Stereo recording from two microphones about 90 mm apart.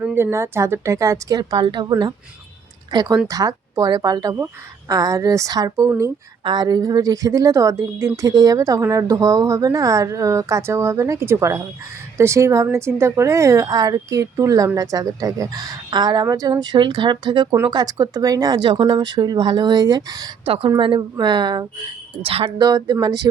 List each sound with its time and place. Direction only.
0.0 s a woman's voice: 25° right (ahead or behind)
1.4 s a woman's voice: 55° right (ahead or behind); by 5.9 s 40° right (ahead or behind)
6.4 s a woman's voice: 55° right (ahead or behind)
16.2 s speech: 40° right (ahead or behind)
20.7 s speech: 65° right (ahead or behind)
22.2 s speech: 90° right
22.6 s speech: 50° right (ahead or behind)